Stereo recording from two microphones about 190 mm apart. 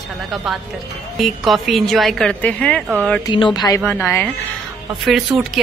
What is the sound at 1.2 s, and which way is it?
A woman's voice, centre (ahead or behind).